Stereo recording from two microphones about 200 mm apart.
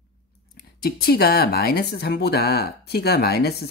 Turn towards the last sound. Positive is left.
turn(degrees=50)  # may be behind; listen again after turning